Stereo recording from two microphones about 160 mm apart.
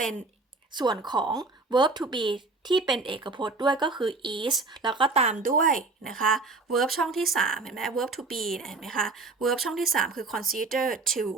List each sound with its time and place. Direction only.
0.7 s a woman's voice: 25° right (ahead or behind); by 6.1 s 60° right (ahead or behind)
6.1 s speech: centre (ahead or behind)
10.0 s speech: 65° right (ahead or behind)
11.1 s speech: centre (ahead or behind)